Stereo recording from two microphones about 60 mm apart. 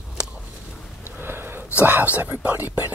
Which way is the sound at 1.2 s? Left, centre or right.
Right.